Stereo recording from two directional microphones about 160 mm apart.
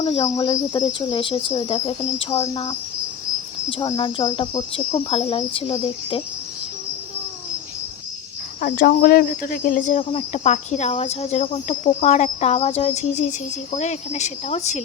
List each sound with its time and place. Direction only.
0.0 s speech: 25° left (ahead or behind)
8.6 s speech: 65° left (ahead or behind); by 14.8 s 45° left (ahead or behind)